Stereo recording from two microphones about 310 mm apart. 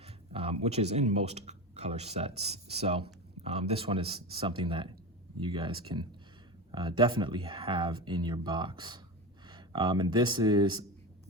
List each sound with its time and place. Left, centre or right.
0.0 s a man's voice: centre